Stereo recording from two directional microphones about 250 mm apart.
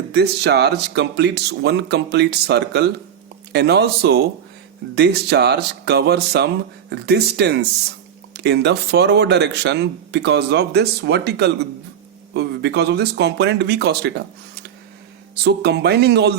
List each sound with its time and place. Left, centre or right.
0.1 s speech: right
15.4 s speech: right